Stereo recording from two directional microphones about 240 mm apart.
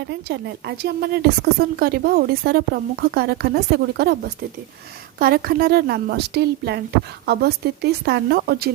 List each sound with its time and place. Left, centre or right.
0.1 s a woman's voice: right
5.2 s a woman's voice: right